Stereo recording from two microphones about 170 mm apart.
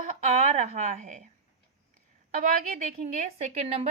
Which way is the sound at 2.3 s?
55° right (ahead or behind).